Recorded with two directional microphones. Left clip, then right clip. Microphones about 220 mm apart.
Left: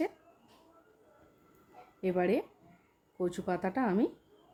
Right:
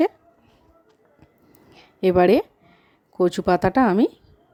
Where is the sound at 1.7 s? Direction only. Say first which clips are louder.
Right 15 dB; 40° right (ahead or behind).